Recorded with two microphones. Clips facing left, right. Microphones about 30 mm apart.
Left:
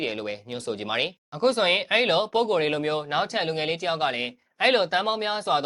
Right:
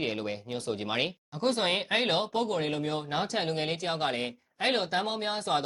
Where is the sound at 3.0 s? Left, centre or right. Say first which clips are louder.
Left 5 dB; left.